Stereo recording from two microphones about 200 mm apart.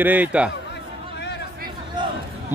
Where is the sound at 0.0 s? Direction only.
10° right (ahead or behind).